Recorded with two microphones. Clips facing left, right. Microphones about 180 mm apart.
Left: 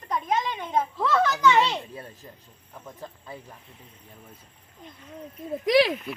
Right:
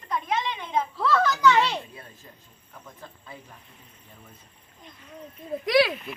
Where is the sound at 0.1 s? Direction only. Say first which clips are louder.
Left 1 dB; 40° left (ahead or behind).